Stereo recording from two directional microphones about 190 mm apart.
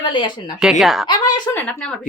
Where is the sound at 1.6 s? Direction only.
5° left (ahead or behind).